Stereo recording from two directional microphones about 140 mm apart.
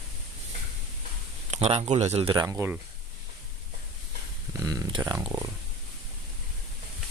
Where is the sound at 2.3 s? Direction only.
20° right (ahead or behind).